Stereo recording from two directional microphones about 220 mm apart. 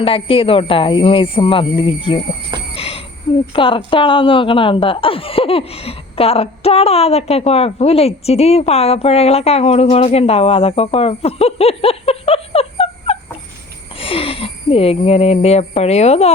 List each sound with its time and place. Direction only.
0.0 s a woman's voice: 25° left (ahead or behind)
2.7 s a sound: 25° left (ahead or behind)
3.5 s a woman's voice: 25° left (ahead or behind)